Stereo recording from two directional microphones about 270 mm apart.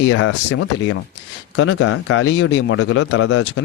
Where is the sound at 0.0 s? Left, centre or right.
Left.